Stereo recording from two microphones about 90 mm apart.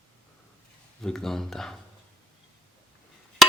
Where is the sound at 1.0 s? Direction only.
5° left (ahead or behind).